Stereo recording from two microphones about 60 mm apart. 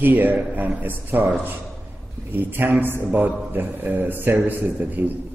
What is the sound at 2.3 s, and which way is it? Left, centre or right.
A man's voice, right.